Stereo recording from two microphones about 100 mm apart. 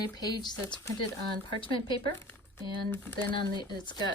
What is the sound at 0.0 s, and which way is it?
Speech, 45° left (ahead or behind).